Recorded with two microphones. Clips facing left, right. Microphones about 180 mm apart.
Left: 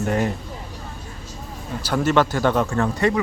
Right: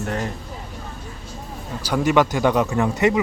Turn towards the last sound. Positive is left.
turn(degrees=-20)  # may be behind; listen again after turning